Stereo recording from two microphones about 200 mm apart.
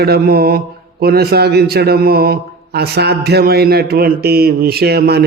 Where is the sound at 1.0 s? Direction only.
50° right (ahead or behind).